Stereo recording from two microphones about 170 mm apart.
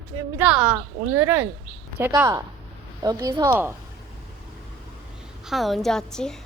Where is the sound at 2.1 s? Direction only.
25° right (ahead or behind).